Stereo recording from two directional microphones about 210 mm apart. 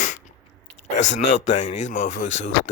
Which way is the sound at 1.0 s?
35° left (ahead or behind).